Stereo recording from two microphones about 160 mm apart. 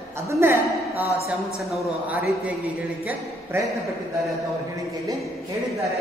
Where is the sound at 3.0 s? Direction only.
15° right (ahead or behind).